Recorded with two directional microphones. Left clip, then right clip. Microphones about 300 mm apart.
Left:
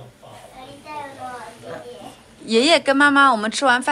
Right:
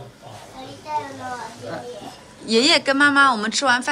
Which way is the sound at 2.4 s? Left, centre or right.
Centre.